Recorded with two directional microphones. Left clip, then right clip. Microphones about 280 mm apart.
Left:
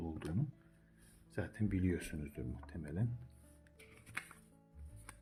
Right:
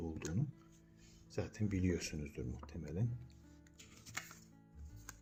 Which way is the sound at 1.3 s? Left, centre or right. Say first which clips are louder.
Left 1 dB; centre.